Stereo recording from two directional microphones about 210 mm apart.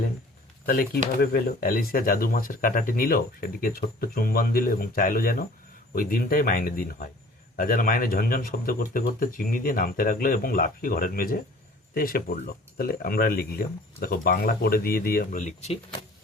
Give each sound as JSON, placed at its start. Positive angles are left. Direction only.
{"t": 0.6, "sound": "speech", "side_deg": 45}